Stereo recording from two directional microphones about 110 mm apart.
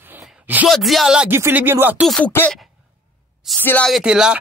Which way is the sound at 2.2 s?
20° left (ahead or behind).